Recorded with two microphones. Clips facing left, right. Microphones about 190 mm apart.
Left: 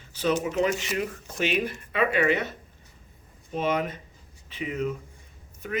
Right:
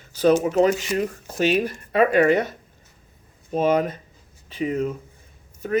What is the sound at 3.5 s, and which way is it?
Speech, 40° right (ahead or behind).